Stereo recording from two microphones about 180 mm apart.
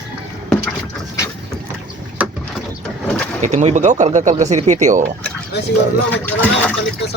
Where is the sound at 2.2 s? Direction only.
10° right (ahead or behind).